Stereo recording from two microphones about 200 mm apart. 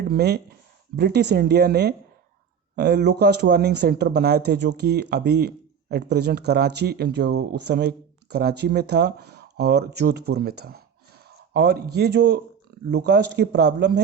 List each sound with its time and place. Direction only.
0.0 s speech: 55° right (ahead or behind)